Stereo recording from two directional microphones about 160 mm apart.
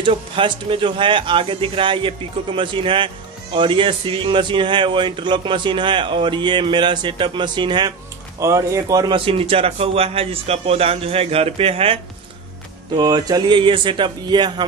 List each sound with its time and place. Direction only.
0.0 s a man's voice: 30° right (ahead or behind)
12.9 s speech: 25° right (ahead or behind)